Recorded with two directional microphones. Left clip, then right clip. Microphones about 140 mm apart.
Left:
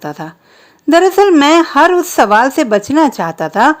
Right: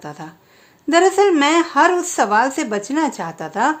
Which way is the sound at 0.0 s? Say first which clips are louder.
Left 9 dB; 55° left (ahead or behind).